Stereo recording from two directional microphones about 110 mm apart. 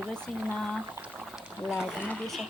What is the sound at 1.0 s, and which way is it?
Pour, 5° right (ahead or behind).